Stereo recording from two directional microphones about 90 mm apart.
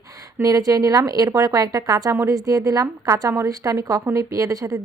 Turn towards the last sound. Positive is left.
turn(degrees=-40)  # may be behind; listen again after turning